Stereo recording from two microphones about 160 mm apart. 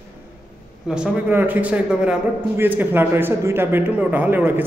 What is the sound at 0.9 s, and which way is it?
A man's voice, 10° right (ahead or behind).